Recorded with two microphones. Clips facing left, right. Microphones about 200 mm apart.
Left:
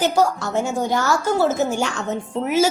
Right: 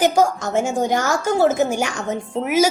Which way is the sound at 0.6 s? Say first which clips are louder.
Right 2 dB; 50° right (ahead or behind).